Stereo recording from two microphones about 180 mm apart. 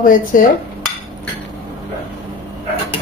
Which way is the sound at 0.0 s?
50° left (ahead or behind).